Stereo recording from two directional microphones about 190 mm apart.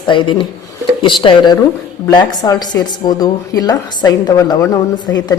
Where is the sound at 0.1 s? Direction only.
25° left (ahead or behind).